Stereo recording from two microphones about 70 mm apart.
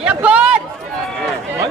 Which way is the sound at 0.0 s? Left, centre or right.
Centre.